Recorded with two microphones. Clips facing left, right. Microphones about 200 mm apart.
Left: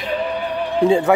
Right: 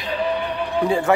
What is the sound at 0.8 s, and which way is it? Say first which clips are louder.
Speech: left 4 dB; 25° left (ahead or behind).